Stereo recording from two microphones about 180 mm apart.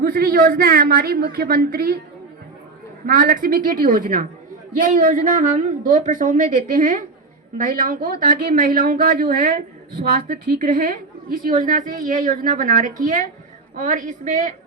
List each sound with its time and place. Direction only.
0.0 s a woman's voice: 55° right (ahead or behind)
3.1 s a woman's voice: 50° right (ahead or behind)